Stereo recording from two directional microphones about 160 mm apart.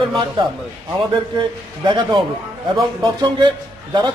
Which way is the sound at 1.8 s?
30° right (ahead or behind).